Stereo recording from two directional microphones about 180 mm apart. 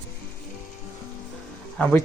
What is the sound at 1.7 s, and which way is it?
Speech, 10° left (ahead or behind).